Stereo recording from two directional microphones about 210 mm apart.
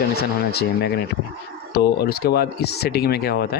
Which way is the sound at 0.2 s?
50° left (ahead or behind).